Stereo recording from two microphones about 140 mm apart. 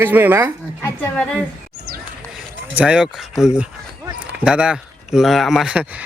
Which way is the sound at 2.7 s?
10° right (ahead or behind).